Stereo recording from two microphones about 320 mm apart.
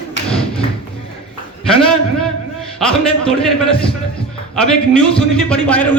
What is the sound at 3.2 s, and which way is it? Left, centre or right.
Speech, centre.